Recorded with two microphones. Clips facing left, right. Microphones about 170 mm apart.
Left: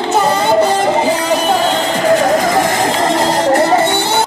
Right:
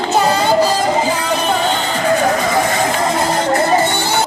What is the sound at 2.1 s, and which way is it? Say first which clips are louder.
Music: left 2 dB; 85° left.